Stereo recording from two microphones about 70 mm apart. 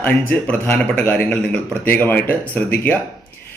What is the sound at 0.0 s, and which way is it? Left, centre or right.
A man's voice, left.